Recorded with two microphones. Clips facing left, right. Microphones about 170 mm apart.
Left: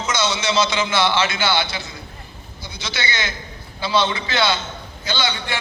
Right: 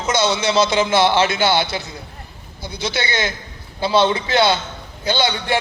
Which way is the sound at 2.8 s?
50° right (ahead or behind).